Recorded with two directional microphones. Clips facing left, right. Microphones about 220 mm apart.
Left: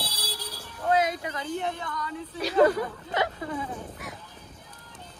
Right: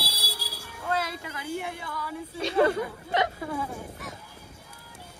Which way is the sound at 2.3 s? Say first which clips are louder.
Left 2 dB; 25° right (ahead or behind).